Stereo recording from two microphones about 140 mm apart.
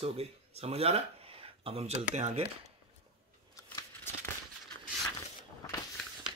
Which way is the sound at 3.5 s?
20° left (ahead or behind).